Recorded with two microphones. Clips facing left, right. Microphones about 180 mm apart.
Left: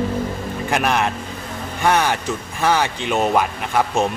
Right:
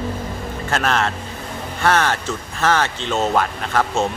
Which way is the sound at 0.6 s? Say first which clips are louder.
Left 1 dB; 15° left (ahead or behind).